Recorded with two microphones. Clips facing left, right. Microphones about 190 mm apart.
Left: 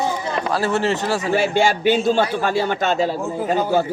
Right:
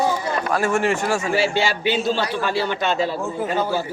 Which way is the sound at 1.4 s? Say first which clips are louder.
Left 3 dB; 50° left (ahead or behind).